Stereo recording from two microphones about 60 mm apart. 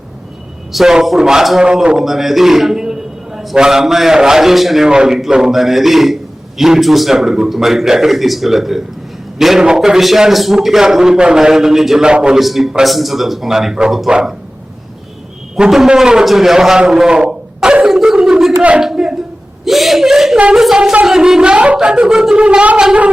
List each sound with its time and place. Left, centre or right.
0.7 s a man's voice: centre
2.0 s a man's voice: centre
12.4 s a man's voice: centre
15.5 s a man's voice: centre
17.8 s dog: centre
18.8 s a sound: centre
19.6 s a man's voice: centre